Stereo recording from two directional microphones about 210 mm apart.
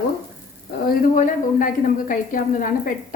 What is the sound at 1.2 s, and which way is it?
A woman's voice, 40° left (ahead or behind).